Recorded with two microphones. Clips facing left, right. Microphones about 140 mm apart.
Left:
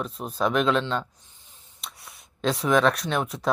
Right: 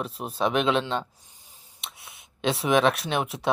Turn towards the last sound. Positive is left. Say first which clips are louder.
# left 1 dB
turn(degrees=-5)  # may be behind; listen again after turning